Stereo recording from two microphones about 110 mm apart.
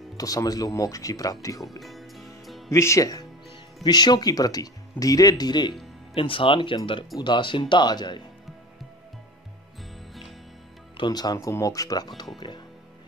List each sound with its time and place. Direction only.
0.2 s speech: 35° left (ahead or behind)
1.8 s music: centre (ahead or behind)
2.7 s speech: 25° left (ahead or behind)
6.1 s speech: 50° left (ahead or behind)
11.0 s speech: 40° left (ahead or behind)
11.3 s speech: 25° left (ahead or behind); by 12.6 s 40° left (ahead or behind)